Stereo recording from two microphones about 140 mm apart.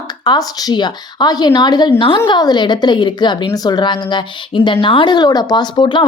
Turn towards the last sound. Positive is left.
turn(degrees=35)  # may be behind; listen again after turning